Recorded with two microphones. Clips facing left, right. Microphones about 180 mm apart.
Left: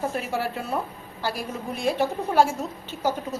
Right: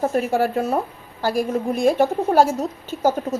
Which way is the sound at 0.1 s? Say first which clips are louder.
Right 8 dB; 45° right (ahead or behind).